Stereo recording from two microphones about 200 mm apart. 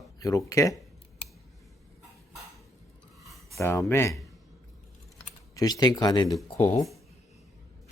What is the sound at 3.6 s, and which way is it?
Speech, 10° left (ahead or behind).